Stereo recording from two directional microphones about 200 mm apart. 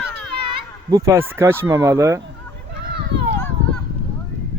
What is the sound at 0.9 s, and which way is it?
Speech, 15° right (ahead or behind).